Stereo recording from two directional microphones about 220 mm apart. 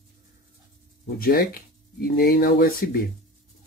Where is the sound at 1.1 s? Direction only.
40° left (ahead or behind).